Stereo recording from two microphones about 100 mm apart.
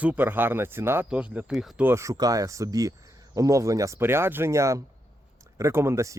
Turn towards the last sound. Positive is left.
turn(degrees=-30)  # may be behind; listen again after turning